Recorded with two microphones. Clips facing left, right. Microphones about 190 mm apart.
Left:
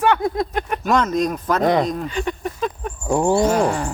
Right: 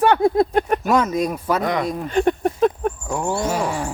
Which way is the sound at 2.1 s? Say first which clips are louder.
Right 6 dB; 50° right (ahead or behind).